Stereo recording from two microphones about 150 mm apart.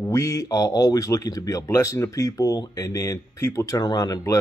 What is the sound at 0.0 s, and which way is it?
Speech, 20° left (ahead or behind).